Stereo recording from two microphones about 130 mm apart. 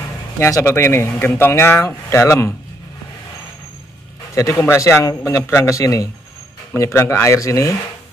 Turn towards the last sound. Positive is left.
turn(degrees=25)  # may be behind; listen again after turning